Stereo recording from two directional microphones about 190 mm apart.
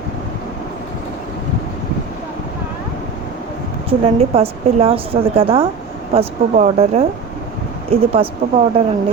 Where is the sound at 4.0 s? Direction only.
30° right (ahead or behind).